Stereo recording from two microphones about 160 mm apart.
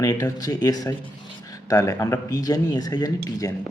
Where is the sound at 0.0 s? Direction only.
20° left (ahead or behind).